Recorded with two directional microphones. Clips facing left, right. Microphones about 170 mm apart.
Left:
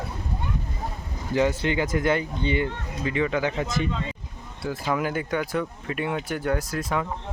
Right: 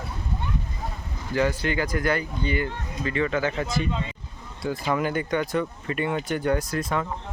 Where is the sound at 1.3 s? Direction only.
20° left (ahead or behind).